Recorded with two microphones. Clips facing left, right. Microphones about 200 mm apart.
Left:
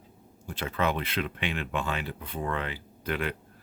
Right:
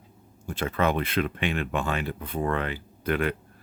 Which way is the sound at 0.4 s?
50° right (ahead or behind).